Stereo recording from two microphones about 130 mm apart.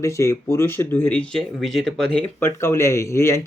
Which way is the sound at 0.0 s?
20° left (ahead or behind).